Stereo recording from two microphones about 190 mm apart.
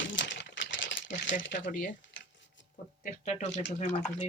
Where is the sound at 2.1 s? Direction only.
75° left (ahead or behind).